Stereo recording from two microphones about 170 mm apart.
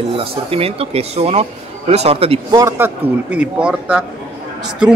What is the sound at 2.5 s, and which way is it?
A man's voice, 15° right (ahead or behind).